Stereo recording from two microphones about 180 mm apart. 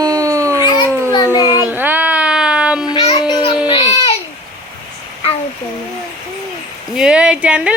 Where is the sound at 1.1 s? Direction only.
20° left (ahead or behind).